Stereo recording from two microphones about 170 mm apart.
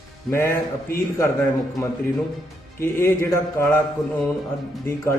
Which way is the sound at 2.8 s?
15° left (ahead or behind).